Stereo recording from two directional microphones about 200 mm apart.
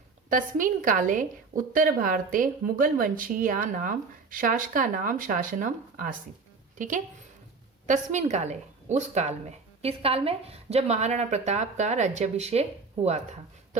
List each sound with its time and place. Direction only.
0.3 s a woman's voice: 40° right (ahead or behind)